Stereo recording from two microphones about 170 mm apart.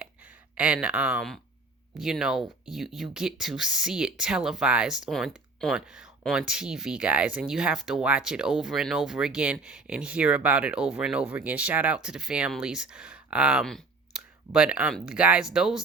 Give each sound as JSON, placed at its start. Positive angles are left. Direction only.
{"t": 0.5, "sound": "speech", "side_deg": -5}